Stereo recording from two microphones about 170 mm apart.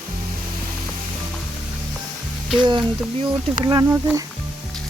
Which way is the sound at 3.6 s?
25° right (ahead or behind).